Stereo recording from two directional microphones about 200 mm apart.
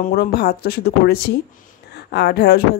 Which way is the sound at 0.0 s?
50° left (ahead or behind).